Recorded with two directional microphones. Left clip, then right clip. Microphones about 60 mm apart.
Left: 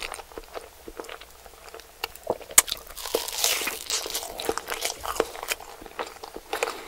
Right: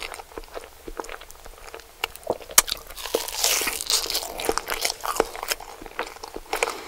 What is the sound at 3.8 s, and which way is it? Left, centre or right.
Crunch, right.